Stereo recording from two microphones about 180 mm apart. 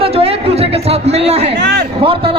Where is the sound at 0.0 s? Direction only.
35° right (ahead or behind).